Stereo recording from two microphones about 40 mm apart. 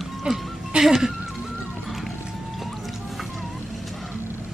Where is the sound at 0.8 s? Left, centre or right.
Centre.